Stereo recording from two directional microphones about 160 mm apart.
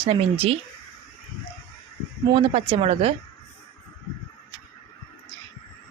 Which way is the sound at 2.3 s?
35° right (ahead or behind).